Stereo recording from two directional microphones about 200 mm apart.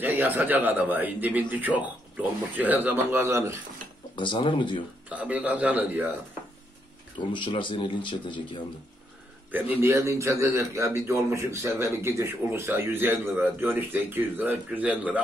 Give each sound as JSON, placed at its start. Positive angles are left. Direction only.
{"t": 0.0, "sound": "a man's voice", "side_deg": -10}
{"t": 4.2, "sound": "speech", "side_deg": 25}
{"t": 5.1, "sound": "a man's voice", "side_deg": -5}
{"t": 7.2, "sound": "speech", "side_deg": 25}
{"t": 9.5, "sound": "a man's voice", "side_deg": -10}